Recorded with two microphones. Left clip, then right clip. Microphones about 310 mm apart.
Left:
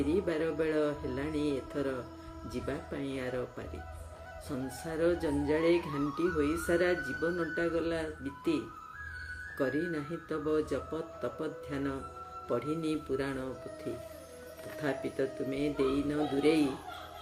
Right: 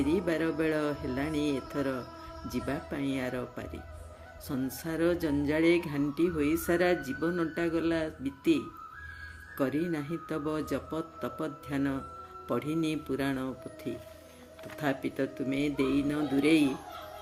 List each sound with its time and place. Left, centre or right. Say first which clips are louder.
0.1 s speech: right 2 dB; right
9.6 s speech: right 2 dB; right
14.8 s speech: right 2 dB; right